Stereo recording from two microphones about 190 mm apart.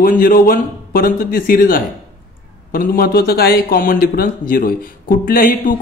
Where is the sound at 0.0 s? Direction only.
50° left (ahead or behind).